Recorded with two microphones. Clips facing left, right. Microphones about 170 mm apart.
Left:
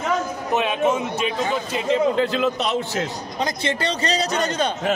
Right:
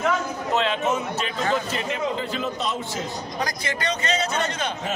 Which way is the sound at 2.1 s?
80° left.